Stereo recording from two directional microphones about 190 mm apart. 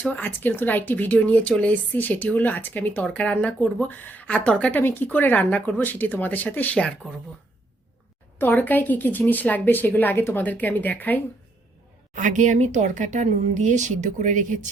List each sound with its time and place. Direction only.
0.0 s speech: 5° left (ahead or behind)
8.4 s speech: 10° left (ahead or behind)
12.1 s speech: 40° right (ahead or behind)